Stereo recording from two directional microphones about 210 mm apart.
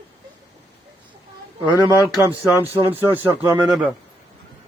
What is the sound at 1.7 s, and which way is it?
Speech, 20° left (ahead or behind).